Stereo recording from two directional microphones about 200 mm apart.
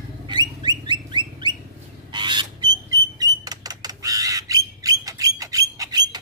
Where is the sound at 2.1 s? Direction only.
20° right (ahead or behind).